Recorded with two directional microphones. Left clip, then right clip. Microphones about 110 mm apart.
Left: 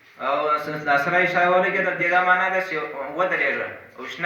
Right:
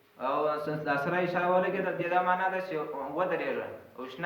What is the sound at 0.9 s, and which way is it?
A man's voice, 30° right (ahead or behind).